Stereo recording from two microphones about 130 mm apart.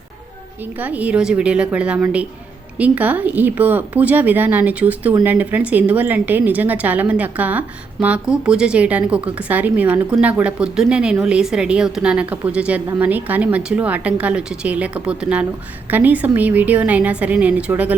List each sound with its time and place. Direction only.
0.8 s a woman's voice: 10° right (ahead or behind)